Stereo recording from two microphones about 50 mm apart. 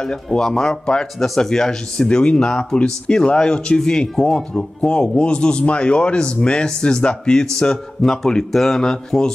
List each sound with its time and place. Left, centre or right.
0.0 s speech: centre